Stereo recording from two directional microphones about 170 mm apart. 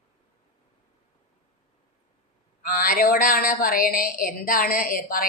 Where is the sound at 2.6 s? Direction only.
55° left (ahead or behind).